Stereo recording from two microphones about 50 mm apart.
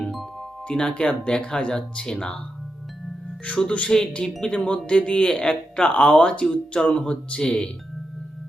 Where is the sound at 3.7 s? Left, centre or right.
Left.